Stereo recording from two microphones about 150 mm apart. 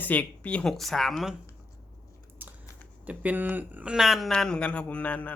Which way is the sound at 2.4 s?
10° right (ahead or behind).